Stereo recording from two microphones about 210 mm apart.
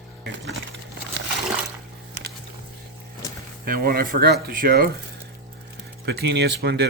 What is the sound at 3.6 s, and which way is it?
Speech, 45° right (ahead or behind).